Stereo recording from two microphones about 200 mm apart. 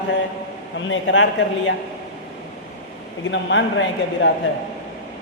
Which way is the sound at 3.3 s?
65° left (ahead or behind).